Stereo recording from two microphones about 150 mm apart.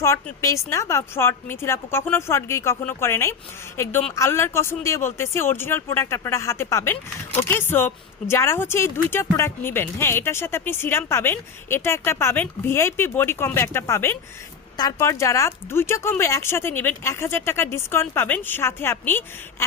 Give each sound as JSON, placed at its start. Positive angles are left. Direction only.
{"t": 0.0, "sound": "speech", "side_deg": 20}